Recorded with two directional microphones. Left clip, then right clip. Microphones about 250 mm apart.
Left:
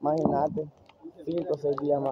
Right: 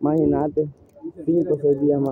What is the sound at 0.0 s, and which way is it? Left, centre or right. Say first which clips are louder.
Speech: right 5 dB; centre.